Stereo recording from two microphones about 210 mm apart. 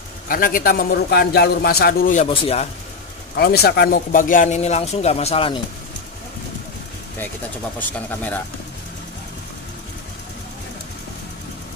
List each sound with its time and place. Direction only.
0.3 s a man's voice: 40° left (ahead or behind)
2.2 s speech: 30° left (ahead or behind)
3.3 s a man's voice: 50° left (ahead or behind); by 5.6 s 25° left (ahead or behind)
8.1 s speech: 10° left (ahead or behind)